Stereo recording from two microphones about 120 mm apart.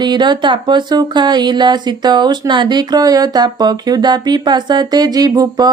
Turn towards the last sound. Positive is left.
turn(degrees=-35)  # may be behind; listen again after turning